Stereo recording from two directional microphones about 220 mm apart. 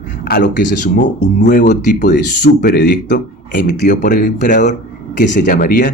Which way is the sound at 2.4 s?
45° left (ahead or behind).